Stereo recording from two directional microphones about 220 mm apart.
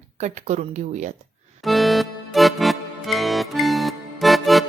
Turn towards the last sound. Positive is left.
turn(degrees=0)  # may be behind; listen again after turning